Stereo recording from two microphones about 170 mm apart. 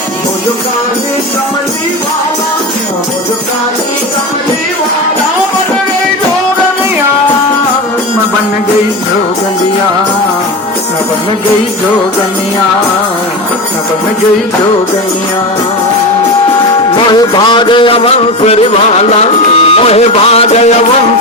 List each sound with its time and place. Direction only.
17.1 s music: 25° left (ahead or behind)